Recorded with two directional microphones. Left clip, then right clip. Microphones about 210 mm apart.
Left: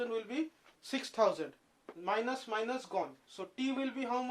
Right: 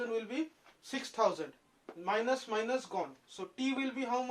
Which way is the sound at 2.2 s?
10° left (ahead or behind).